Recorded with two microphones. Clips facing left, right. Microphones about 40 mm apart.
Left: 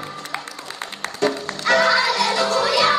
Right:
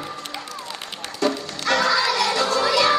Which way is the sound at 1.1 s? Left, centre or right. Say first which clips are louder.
Left 1 dB; left.